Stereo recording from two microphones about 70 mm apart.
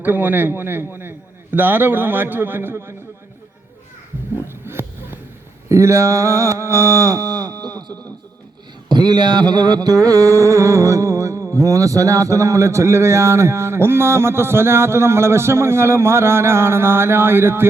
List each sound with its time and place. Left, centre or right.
0.0 s a man's voice: right
4.6 s a sound: right
8.9 s music: right
11.5 s a man's voice: right